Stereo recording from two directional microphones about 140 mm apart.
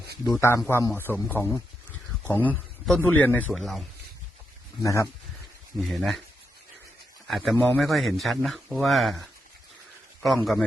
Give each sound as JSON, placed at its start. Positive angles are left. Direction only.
{"t": 0.3, "sound": "a man's voice", "side_deg": 20}
{"t": 3.5, "sound": "speech", "side_deg": 0}
{"t": 4.8, "sound": "a man's voice", "side_deg": 20}
{"t": 5.7, "sound": "speech", "side_deg": 0}
{"t": 7.3, "sound": "a man's voice", "side_deg": 0}